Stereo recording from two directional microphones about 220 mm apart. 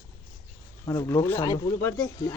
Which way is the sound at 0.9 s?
15° left (ahead or behind).